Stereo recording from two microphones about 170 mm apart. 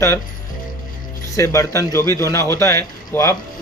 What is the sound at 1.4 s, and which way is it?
A man's voice, 15° left (ahead or behind).